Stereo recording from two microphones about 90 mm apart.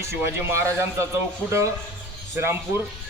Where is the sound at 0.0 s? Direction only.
30° right (ahead or behind).